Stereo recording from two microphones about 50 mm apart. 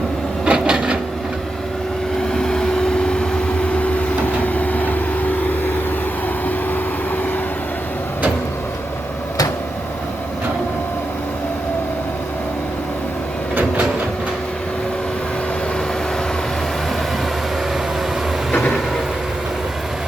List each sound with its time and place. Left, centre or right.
0.4 s wood: centre
2.3 s vehicle: centre; by 5.7 s left